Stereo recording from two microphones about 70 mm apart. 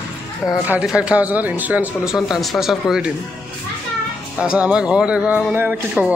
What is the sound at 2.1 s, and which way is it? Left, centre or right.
Speech, centre.